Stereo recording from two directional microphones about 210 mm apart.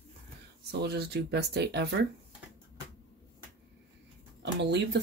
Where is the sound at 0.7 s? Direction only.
50° right (ahead or behind).